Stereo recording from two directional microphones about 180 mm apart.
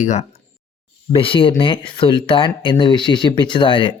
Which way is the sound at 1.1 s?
30° left (ahead or behind).